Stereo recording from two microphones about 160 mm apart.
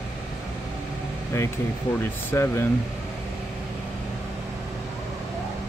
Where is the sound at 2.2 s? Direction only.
15° left (ahead or behind).